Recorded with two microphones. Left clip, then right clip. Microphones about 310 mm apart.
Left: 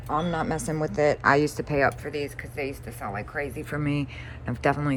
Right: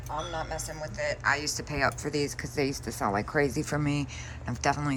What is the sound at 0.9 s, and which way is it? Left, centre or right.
Speech, centre.